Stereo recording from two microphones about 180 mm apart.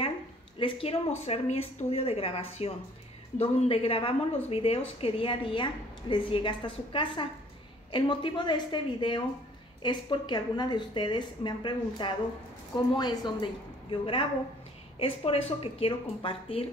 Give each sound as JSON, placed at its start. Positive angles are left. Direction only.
{"t": 0.6, "sound": "a woman's voice", "side_deg": 30}